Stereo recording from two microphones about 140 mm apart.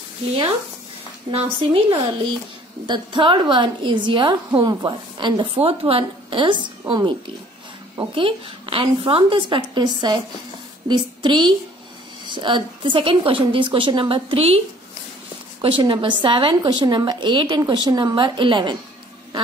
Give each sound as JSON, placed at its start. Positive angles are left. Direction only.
{"t": 1.3, "sound": "a woman's voice", "side_deg": -40}
{"t": 15.6, "sound": "a woman's voice", "side_deg": -40}